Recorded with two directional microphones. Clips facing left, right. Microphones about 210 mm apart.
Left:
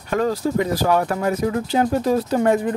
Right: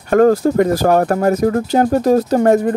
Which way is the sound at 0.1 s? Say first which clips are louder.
Right 9 dB; 50° right (ahead or behind).